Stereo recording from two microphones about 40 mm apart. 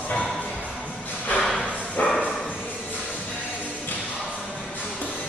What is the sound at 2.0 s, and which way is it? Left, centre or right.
Bow-wow, left.